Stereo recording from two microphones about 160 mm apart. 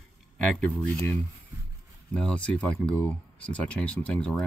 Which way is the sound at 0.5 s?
10° left (ahead or behind).